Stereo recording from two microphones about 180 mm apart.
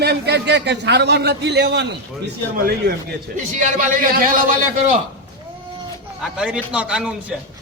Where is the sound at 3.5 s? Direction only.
45° right (ahead or behind).